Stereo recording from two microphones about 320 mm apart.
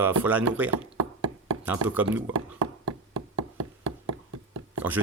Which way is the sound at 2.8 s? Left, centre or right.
Right.